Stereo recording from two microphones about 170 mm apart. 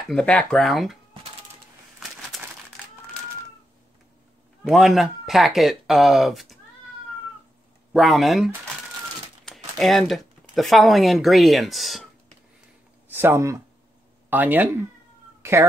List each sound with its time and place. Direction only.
0.1 s speech: 5° left (ahead or behind)
4.6 s speech: centre (ahead or behind)
7.9 s speech: centre (ahead or behind)
13.1 s speech: 15° right (ahead or behind)
15.4 s cat: 15° right (ahead or behind)